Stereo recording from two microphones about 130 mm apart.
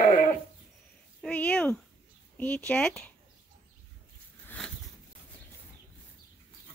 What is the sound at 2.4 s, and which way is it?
Speech, 10° left (ahead or behind).